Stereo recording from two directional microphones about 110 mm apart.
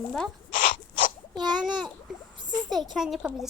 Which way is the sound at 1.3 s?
40° right (ahead or behind).